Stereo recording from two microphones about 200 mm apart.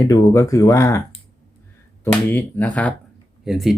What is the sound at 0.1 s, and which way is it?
Speech, 15° left (ahead or behind).